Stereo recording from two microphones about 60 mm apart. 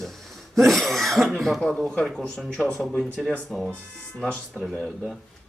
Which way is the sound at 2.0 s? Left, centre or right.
Centre.